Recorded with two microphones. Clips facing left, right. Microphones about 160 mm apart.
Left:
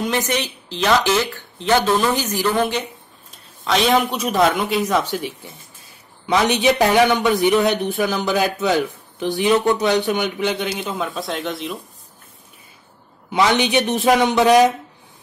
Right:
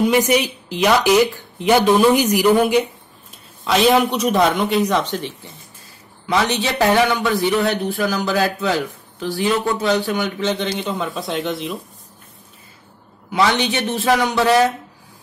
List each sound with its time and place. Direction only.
0.0 s a man's voice: 10° right (ahead or behind)
13.3 s a man's voice: 15° left (ahead or behind)